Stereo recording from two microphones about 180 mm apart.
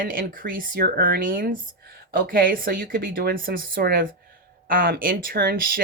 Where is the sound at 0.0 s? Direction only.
50° right (ahead or behind).